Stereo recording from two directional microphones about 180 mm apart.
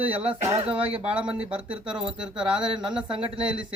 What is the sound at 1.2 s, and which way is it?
Speech, 5° right (ahead or behind).